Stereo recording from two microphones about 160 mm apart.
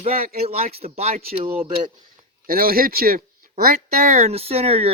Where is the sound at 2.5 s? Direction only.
65° right (ahead or behind).